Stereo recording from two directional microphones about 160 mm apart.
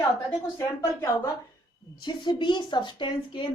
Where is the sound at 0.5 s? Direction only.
20° left (ahead or behind).